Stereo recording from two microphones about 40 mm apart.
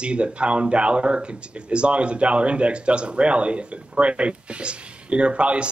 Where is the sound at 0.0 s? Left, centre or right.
Right.